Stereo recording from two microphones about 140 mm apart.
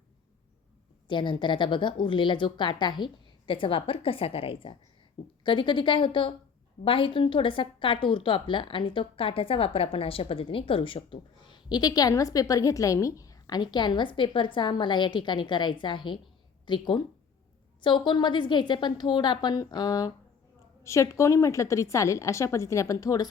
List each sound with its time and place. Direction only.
1.0 s a woman's voice: 35° left (ahead or behind)